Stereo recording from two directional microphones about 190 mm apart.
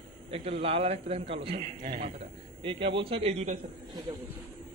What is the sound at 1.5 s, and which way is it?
Speech, 50° right (ahead or behind).